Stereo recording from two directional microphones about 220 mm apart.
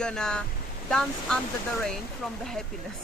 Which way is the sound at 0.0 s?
5° left (ahead or behind).